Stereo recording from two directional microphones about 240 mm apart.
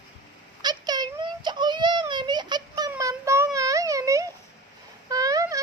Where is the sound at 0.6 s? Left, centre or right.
Centre.